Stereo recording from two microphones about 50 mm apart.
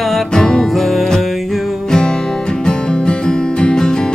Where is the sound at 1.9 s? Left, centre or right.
Centre.